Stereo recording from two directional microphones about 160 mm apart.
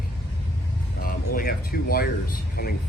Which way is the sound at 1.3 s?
65° left (ahead or behind).